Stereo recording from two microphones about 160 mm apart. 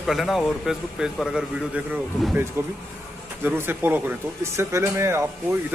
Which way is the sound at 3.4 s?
15° right (ahead or behind).